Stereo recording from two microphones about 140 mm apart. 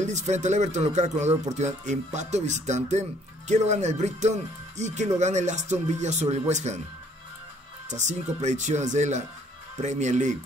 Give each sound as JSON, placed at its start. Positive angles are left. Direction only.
{"t": 0.0, "sound": "speech", "side_deg": -55}
{"t": 7.9, "sound": "speech", "side_deg": -55}